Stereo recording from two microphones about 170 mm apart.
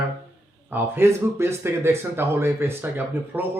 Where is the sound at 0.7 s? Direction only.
15° right (ahead or behind).